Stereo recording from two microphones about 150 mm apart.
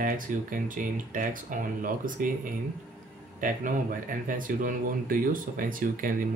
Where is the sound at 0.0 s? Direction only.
65° right (ahead or behind).